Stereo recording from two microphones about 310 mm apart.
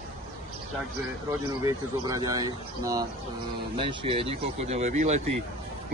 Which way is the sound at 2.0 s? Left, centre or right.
Centre.